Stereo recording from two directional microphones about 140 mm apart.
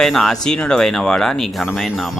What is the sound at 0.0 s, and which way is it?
Speech, centre (ahead or behind).